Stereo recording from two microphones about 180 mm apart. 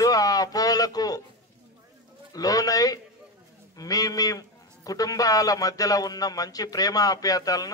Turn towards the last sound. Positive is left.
turn(degrees=20)  # may be behind; listen again after turning